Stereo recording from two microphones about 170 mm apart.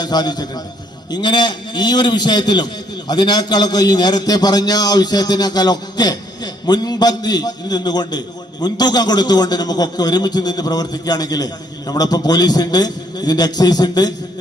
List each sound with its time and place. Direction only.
0.0 s a man's voice: 25° left (ahead or behind)